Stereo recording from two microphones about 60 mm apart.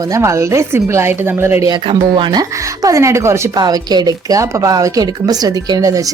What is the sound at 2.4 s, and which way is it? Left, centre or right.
A woman's voice, right.